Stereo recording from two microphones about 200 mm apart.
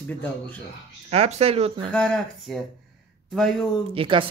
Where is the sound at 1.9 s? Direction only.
5° left (ahead or behind).